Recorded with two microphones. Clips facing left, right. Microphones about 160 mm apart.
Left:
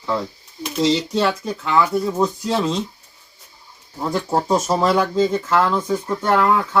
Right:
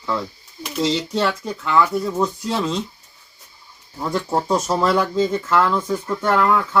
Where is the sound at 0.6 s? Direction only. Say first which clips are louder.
Left 3 dB; 20° left (ahead or behind).